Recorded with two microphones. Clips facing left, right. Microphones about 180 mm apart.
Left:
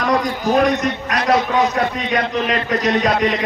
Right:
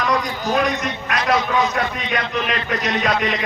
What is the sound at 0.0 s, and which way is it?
A man's voice, 45° left (ahead or behind).